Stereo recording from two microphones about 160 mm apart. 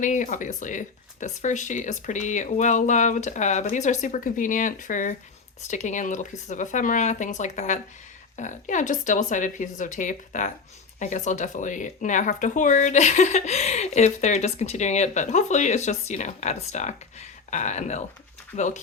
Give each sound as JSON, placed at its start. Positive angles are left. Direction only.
{"t": 0.0, "sound": "speech", "side_deg": 50}